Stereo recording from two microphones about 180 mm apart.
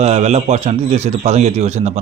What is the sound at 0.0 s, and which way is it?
A man's voice, 35° right (ahead or behind).